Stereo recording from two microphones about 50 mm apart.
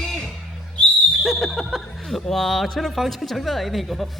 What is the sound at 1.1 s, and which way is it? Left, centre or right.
Speech, centre.